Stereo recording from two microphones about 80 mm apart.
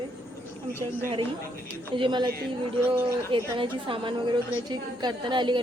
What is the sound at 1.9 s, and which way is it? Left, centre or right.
Speech, right.